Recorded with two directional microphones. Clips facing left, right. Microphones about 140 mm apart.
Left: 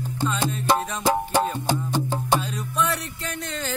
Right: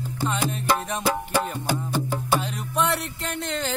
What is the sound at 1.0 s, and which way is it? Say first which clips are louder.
Music: left 4 dB; 25° left (ahead or behind).